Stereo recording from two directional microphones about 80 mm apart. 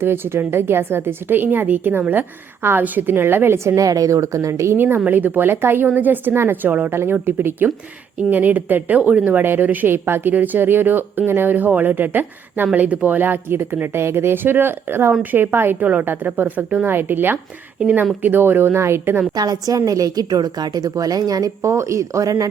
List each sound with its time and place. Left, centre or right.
0.0 s a woman's voice: right
19.3 s a woman's voice: right